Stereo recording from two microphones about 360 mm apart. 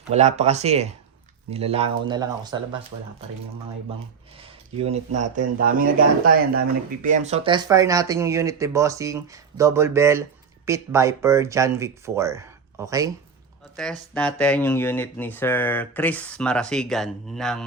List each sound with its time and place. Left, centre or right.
0.1 s speech: centre
4.8 s speech: centre
13.7 s speech: centre